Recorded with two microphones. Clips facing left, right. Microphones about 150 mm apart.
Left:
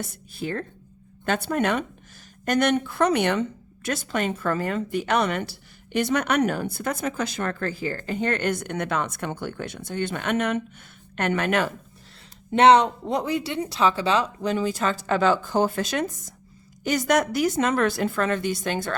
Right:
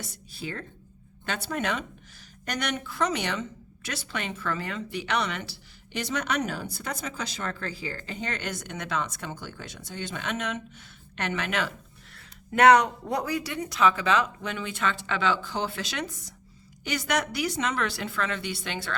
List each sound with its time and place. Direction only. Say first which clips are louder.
0.0 s speech: left 6 dB; 50° left (ahead or behind)
3.8 s speech: left 8 dB; 45° left (ahead or behind)
12.5 s speech: left 3 dB; 25° left (ahead or behind); by 18.9 s 45° left (ahead or behind)